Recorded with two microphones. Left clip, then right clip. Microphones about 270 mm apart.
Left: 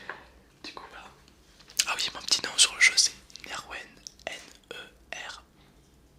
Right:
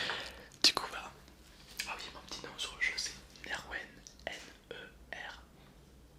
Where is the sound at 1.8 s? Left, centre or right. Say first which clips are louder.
Left 13 dB; left.